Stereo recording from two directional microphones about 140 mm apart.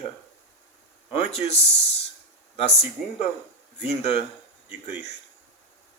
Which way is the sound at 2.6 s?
45° left (ahead or behind).